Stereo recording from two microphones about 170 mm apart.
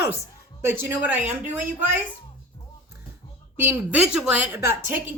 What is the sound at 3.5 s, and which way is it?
Speech, 10° right (ahead or behind).